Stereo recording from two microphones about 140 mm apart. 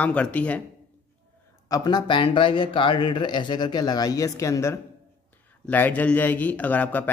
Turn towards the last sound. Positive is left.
turn(degrees=10)  # may be behind; listen again after turning